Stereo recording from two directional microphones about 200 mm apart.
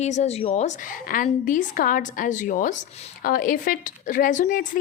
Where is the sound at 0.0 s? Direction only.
35° left (ahead or behind).